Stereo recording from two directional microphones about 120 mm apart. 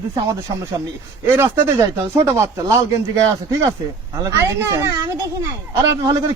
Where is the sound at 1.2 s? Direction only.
20° right (ahead or behind).